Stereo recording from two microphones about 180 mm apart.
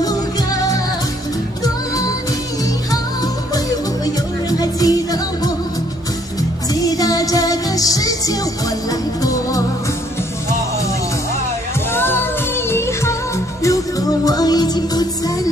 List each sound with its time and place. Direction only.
0.0 s music: 20° left (ahead or behind)
3.5 s music: 20° left (ahead or behind)
6.7 s music: 20° left (ahead or behind)
11.9 s music: 10° left (ahead or behind)